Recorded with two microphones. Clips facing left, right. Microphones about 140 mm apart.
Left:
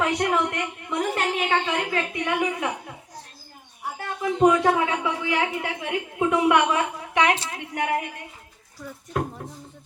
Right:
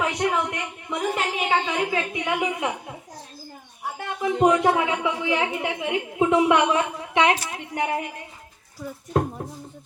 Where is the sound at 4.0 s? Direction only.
20° right (ahead or behind).